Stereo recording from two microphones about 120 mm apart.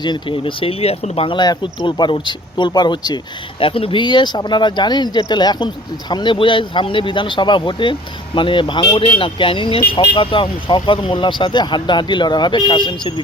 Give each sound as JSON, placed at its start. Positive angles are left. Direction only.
{"t": 0.0, "sound": "speech", "side_deg": 40}
{"t": 1.4, "sound": "speech", "side_deg": 35}
{"t": 3.6, "sound": "speech", "side_deg": 50}